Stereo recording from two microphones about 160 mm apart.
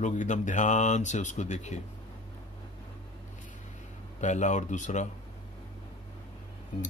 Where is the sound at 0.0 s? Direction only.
50° left (ahead or behind).